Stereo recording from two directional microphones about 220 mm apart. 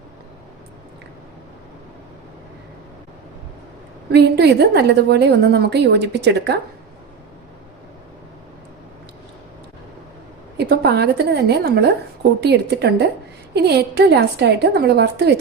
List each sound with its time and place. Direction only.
4.1 s a woman's voice: 50° right (ahead or behind)
10.6 s a woman's voice: 45° right (ahead or behind)